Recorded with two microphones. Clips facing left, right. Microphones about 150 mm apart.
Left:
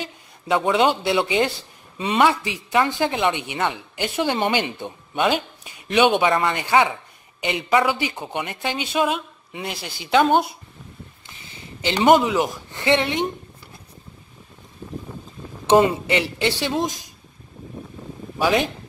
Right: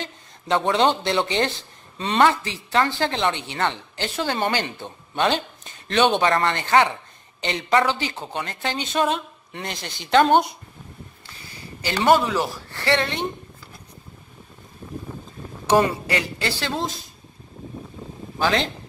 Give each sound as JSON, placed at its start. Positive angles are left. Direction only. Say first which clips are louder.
{"t": 0.0, "sound": "speech", "louder": "left 1 dB", "side_deg": 10}
{"t": 11.2, "sound": "speech", "louder": "right 1 dB", "side_deg": 20}
{"t": 15.6, "sound": "speech", "louder": "left 3 dB", "side_deg": 20}
{"t": 18.4, "sound": "speech", "louder": "left 2 dB", "side_deg": 10}